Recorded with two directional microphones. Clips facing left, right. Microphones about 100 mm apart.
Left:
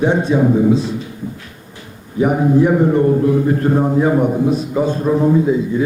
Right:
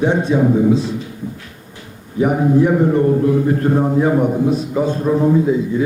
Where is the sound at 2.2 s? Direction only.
20° left (ahead or behind).